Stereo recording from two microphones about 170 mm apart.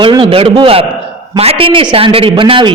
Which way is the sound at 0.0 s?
30° right (ahead or behind).